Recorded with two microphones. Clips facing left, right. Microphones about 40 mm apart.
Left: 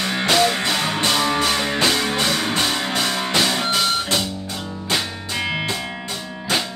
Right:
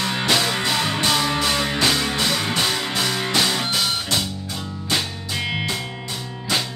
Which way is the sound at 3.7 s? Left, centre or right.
Left.